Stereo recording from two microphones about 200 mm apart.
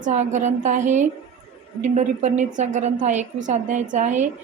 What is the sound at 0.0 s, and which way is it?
A woman's voice, 35° right (ahead or behind).